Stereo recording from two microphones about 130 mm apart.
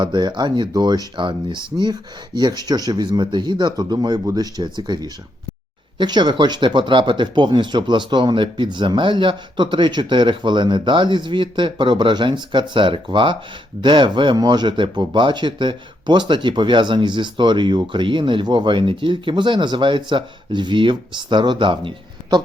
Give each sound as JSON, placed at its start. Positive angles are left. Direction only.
{"t": 0.0, "sound": "speech", "side_deg": -35}